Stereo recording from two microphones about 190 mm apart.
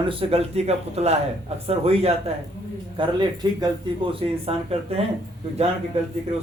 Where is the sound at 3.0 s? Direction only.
20° right (ahead or behind).